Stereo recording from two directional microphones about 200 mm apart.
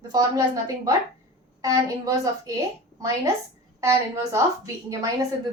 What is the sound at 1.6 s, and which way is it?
Speech, 15° right (ahead or behind).